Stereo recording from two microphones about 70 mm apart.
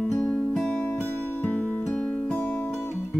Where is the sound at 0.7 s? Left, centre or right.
Left; by 2.3 s centre.